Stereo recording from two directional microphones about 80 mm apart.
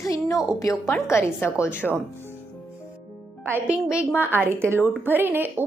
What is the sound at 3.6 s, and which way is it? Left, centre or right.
Speech, centre.